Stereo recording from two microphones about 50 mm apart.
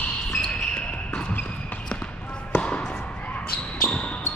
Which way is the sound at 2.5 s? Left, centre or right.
Left.